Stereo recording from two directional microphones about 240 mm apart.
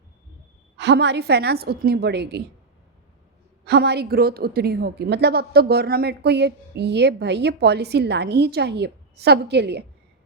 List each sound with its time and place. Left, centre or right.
0.8 s a woman's voice: right
3.7 s a woman's voice: right